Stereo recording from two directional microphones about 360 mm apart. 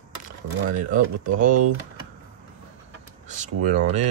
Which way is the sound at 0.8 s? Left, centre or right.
Right.